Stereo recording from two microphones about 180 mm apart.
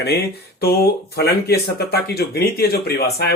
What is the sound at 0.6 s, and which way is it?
Speech, 60° left (ahead or behind).